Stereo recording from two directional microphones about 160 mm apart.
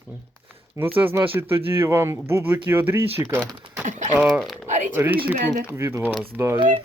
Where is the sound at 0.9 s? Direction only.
15° right (ahead or behind).